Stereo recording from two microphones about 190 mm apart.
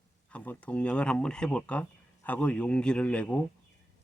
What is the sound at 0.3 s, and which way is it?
Speech, 5° left (ahead or behind).